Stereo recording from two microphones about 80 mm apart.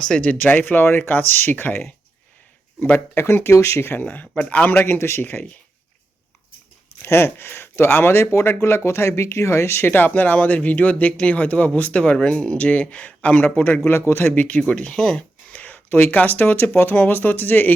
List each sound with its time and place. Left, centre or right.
0.0 s speech: centre
3.2 s a man's voice: left
4.1 s speech: centre
4.8 s a man's voice: left
7.0 s speech: left